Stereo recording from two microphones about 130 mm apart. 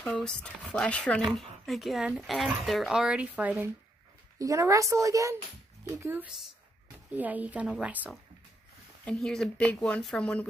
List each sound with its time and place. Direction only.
0.0 s speech: 5° left (ahead or behind); by 3.7 s 10° right (ahead or behind)
4.4 s a woman's voice: 25° right (ahead or behind)
9.0 s speech: 5° left (ahead or behind)